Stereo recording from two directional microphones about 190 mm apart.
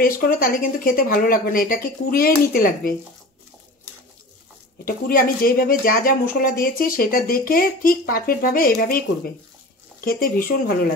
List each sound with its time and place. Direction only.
0.0 s speech: 50° left (ahead or behind)
4.8 s speech: 50° left (ahead or behind)